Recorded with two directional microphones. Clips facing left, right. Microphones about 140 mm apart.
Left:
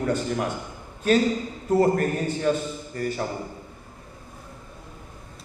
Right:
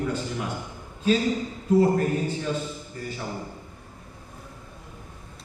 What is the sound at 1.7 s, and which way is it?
Speech, 60° left (ahead or behind).